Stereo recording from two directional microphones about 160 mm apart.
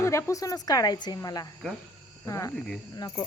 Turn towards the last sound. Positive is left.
turn(degrees=25)  # may be behind; listen again after turning